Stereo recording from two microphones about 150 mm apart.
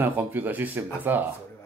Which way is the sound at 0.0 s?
15° right (ahead or behind).